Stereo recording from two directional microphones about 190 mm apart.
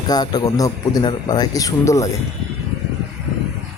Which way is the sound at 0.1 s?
20° left (ahead or behind).